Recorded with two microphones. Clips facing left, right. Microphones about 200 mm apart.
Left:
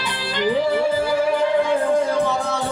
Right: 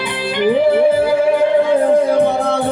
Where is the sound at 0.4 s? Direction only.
55° right (ahead or behind).